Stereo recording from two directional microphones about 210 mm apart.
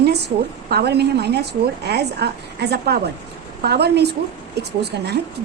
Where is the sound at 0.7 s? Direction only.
50° right (ahead or behind).